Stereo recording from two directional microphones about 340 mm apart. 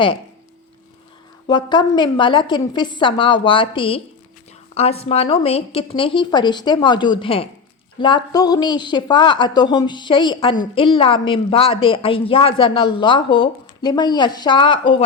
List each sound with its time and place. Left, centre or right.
1.5 s a woman's voice: centre